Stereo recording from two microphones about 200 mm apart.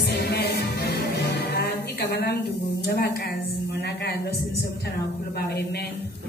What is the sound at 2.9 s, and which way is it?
A woman's voice, 50° left (ahead or behind).